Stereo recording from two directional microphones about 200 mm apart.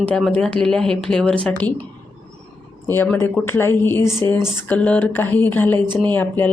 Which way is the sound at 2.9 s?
10° left (ahead or behind).